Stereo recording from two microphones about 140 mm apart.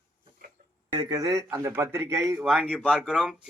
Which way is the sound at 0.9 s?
25° right (ahead or behind).